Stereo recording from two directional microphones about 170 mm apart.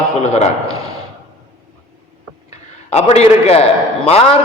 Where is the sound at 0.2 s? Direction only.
40° left (ahead or behind).